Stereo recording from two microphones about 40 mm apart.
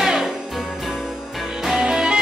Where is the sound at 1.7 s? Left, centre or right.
Centre.